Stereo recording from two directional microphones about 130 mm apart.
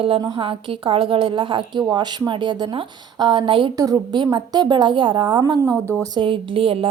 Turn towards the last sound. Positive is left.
turn(degrees=-45)  # may be behind; listen again after turning